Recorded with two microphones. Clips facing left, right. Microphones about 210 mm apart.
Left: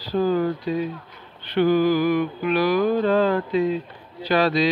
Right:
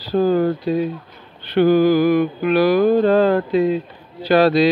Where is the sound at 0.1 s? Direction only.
35° right (ahead or behind).